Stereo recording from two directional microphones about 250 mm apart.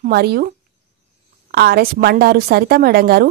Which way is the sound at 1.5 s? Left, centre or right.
Right.